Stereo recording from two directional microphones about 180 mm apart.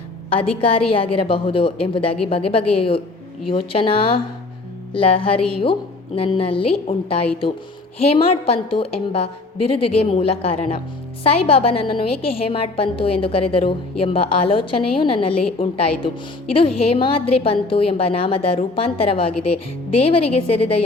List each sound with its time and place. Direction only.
0.3 s a woman's voice: 30° left (ahead or behind)